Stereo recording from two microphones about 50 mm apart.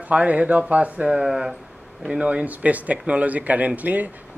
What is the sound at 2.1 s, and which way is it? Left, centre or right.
Speech, right.